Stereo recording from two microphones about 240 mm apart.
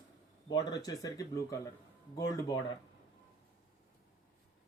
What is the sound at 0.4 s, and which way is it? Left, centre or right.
Speech, centre.